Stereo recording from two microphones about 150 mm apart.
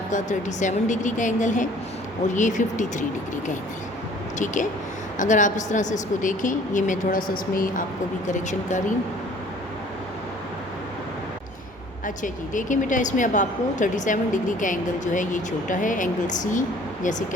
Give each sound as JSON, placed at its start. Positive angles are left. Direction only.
{"t": 0.1, "sound": "a woman's voice", "side_deg": 55}
{"t": 5.1, "sound": "a woman's voice", "side_deg": 55}
{"t": 8.3, "sound": "a woman's voice", "side_deg": 55}
{"t": 12.0, "sound": "a woman's voice", "side_deg": 60}